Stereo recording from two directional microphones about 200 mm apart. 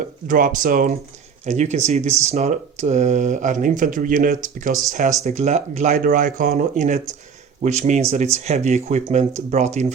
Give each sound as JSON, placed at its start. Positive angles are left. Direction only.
{"t": 0.3, "sound": "speech", "side_deg": -40}